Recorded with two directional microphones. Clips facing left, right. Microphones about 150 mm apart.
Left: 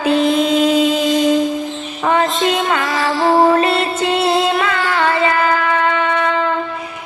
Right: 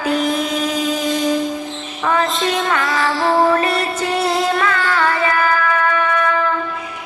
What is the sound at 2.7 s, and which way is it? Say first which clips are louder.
Music: left 1 dB; 25° left (ahead or behind).